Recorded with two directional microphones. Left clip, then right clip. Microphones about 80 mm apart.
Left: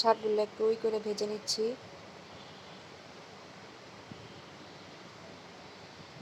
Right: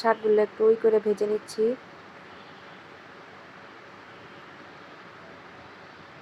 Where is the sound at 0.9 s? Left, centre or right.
Right.